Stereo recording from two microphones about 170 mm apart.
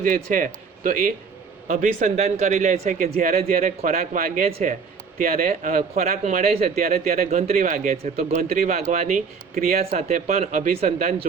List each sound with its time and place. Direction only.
0.0 s a man's voice: 55° right (ahead or behind)
3.0 s a man's voice: 55° right (ahead or behind); by 8.3 s 40° right (ahead or behind)
8.3 s a man's voice: 50° right (ahead or behind)